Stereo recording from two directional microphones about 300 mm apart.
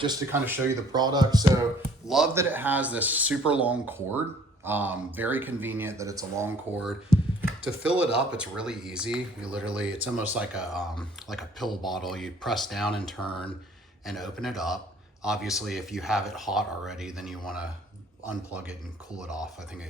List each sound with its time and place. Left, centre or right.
0.0 s speech: centre
2.0 s speech: centre
14.0 s speech: centre